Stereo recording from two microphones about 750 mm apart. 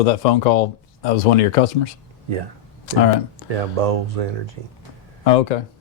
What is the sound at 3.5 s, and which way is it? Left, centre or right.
Speech, right.